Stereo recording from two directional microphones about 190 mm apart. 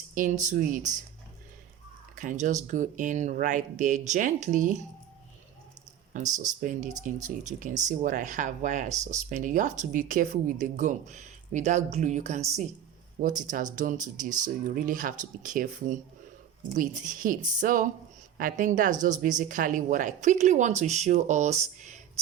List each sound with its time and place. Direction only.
0.1 s speech: 45° right (ahead or behind)
2.1 s speech: 40° right (ahead or behind)
6.6 s speech: 40° right (ahead or behind)